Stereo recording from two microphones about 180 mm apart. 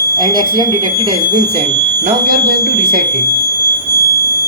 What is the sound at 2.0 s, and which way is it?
Speech, 55° right (ahead or behind).